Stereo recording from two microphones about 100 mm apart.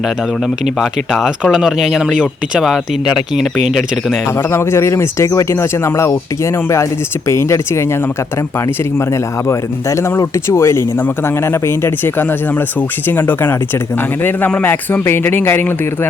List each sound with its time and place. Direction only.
0.8 s speech: centre (ahead or behind)
4.5 s speech: 25° left (ahead or behind)
9.5 s speech: 30° left (ahead or behind)